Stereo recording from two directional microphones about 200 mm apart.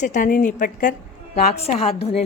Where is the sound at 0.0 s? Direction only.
40° left (ahead or behind).